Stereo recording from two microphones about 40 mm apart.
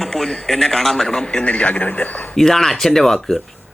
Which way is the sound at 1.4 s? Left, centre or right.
Left.